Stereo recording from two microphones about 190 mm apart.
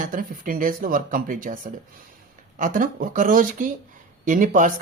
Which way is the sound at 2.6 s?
45° right (ahead or behind).